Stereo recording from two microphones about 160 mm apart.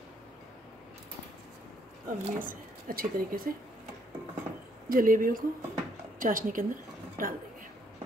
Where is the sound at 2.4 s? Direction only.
60° right (ahead or behind).